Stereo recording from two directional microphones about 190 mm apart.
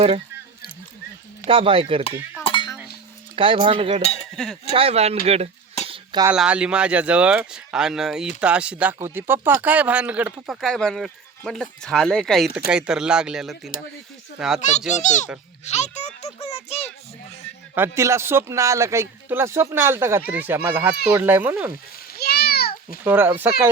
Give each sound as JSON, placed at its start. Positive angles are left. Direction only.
{"t": 1.5, "sound": "speech", "side_deg": -30}
{"t": 2.4, "sound": "cutlery", "side_deg": 25}
{"t": 3.3, "sound": "speech", "side_deg": -25}
{"t": 4.0, "sound": "speech", "side_deg": 35}
{"t": 4.7, "sound": "speech", "side_deg": -30}
{"t": 5.9, "sound": "a sound", "side_deg": -25}
{"t": 6.3, "sound": "speech", "side_deg": -5}
{"t": 14.6, "sound": "a child's voice", "side_deg": 40}
{"t": 15.6, "sound": "music", "side_deg": 35}
{"t": 17.7, "sound": "speech", "side_deg": -15}
{"t": 22.1, "sound": "a sound", "side_deg": 55}
{"t": 23.0, "sound": "speech", "side_deg": -10}